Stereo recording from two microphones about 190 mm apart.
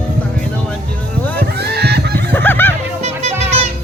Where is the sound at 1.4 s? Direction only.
60° right (ahead or behind).